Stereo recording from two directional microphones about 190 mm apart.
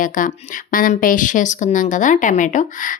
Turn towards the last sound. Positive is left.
turn(degrees=45)  # may be behind; listen again after turning